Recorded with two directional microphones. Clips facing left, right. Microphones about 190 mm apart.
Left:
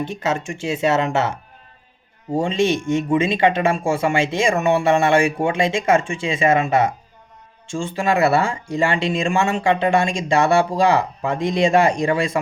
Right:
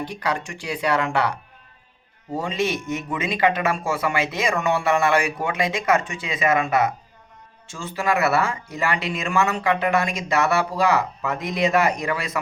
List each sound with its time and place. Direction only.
0.0 s speech: 25° left (ahead or behind)